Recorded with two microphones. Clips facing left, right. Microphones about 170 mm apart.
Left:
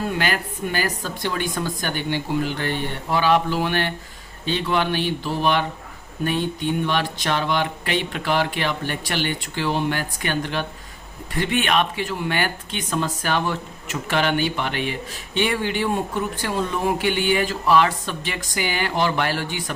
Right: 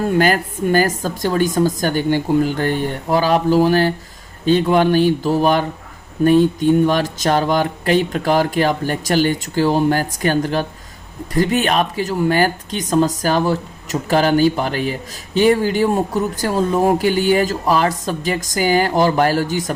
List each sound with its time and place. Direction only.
0.2 s a woman's voice: 45° right (ahead or behind)